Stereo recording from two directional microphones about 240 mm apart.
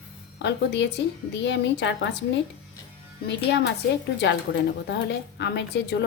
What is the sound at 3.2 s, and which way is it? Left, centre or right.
Speech, left.